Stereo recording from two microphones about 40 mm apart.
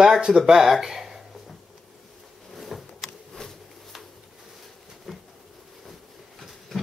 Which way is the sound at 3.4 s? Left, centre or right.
Centre.